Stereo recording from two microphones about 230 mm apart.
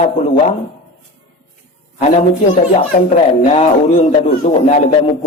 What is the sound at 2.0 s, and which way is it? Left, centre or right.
A man's voice, left.